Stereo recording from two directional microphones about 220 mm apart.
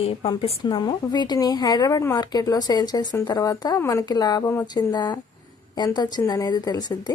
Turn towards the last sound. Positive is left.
turn(degrees=20)  # may be behind; listen again after turning